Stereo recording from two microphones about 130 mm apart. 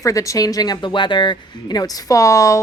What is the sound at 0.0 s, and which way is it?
A woman's voice, 25° left (ahead or behind).